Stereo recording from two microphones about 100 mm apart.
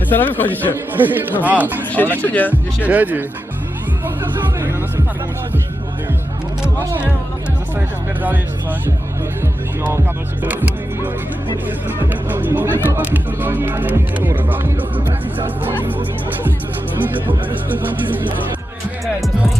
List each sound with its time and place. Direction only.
0.1 s a man's voice: 20° left (ahead or behind)
0.9 s speech: 20° right (ahead or behind)
1.9 s speech: 20° left (ahead or behind)
2.8 s speech: 15° right (ahead or behind)
7.8 s speech: 15° right (ahead or behind)
10.4 s speech: 20° right (ahead or behind)